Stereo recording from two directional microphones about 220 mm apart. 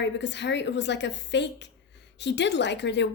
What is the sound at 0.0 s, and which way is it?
A woman's voice, 55° left (ahead or behind).